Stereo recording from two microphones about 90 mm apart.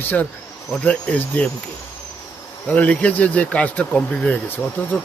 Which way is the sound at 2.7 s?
15° left (ahead or behind).